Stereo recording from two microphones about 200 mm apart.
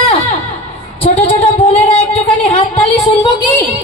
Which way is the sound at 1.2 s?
30° left (ahead or behind).